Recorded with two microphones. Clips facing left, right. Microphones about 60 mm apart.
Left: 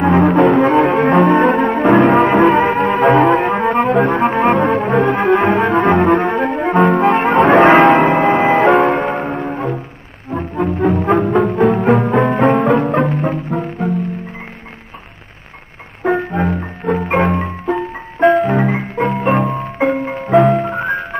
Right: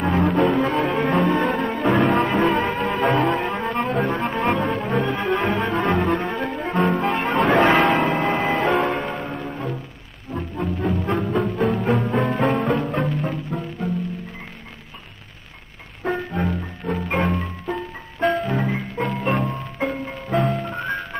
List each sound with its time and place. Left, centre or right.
0.0 s cello: left
2.0 s music: left
5.0 s saxophone: left
8.5 s music: left
16.1 s music: left
16.3 s music: left